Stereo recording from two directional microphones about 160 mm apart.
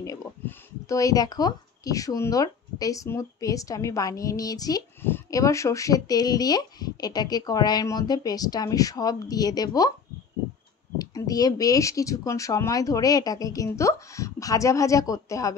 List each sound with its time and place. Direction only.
0.0 s speech: 20° left (ahead or behind)
11.0 s speech: 25° left (ahead or behind)